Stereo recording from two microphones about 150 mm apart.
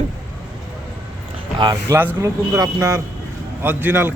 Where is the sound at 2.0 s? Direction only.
15° right (ahead or behind).